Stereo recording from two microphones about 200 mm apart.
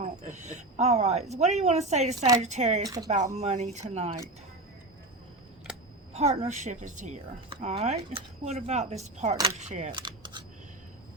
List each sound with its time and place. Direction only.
0.0 s speech: 35° right (ahead or behind)
2.8 s speech: 20° right (ahead or behind)
3.3 s speech: 35° right (ahead or behind)
6.1 s speech: 35° right (ahead or behind)
9.9 s speech: 20° right (ahead or behind)